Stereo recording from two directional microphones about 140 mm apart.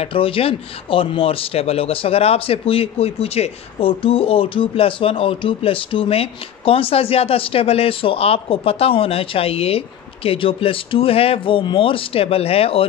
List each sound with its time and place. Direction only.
0.0 s speech: 40° left (ahead or behind)